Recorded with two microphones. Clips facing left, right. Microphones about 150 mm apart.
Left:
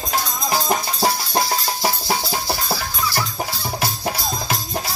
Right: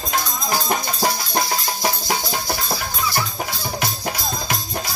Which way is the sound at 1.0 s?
30° left (ahead or behind).